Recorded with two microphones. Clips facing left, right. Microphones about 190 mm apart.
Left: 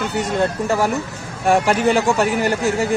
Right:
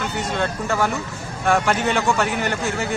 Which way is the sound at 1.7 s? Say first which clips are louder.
Left 4 dB; 35° left (ahead or behind).